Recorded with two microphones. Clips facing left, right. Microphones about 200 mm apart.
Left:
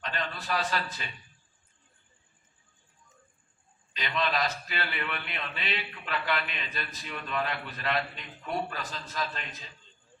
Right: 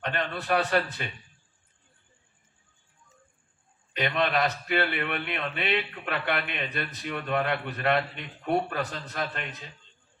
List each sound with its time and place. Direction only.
0.0 s a man's voice: 60° right (ahead or behind)
3.9 s a man's voice: 55° right (ahead or behind)